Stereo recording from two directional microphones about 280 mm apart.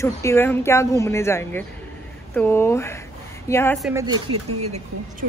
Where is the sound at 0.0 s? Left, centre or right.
Centre.